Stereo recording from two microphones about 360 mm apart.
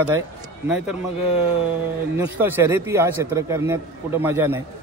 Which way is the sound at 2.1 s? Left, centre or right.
Centre.